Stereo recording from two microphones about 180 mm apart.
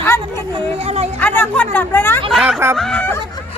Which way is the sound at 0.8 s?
35° right (ahead or behind).